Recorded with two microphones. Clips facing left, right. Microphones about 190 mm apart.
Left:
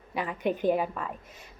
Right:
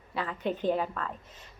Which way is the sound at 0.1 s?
15° left (ahead or behind).